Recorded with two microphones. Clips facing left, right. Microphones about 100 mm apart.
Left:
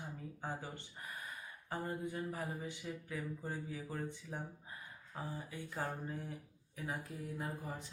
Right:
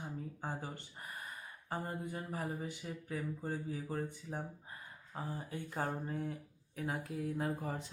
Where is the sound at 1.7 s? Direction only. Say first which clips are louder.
Even; 35° right (ahead or behind).